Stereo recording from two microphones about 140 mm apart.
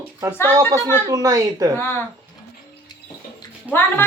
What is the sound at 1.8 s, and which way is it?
Speech, 15° left (ahead or behind).